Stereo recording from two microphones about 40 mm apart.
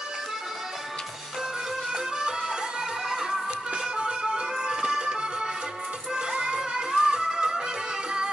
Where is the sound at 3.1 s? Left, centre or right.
Centre.